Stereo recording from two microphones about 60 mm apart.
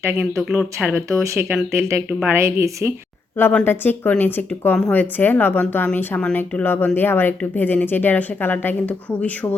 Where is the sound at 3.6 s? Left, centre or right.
Left.